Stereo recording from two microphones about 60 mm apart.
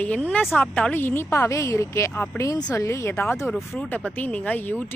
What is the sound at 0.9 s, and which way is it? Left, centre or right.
A woman's voice, left.